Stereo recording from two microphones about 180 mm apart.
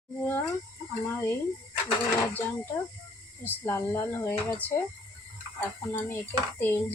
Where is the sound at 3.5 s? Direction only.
10° left (ahead or behind).